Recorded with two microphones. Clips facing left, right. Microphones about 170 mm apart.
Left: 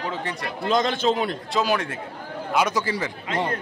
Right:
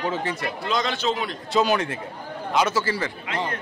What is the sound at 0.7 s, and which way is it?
Speech, 50° left (ahead or behind).